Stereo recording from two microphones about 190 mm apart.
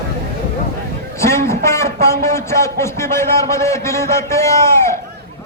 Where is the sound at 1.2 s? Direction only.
15° left (ahead or behind).